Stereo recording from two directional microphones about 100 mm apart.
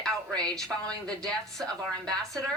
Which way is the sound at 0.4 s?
10° left (ahead or behind).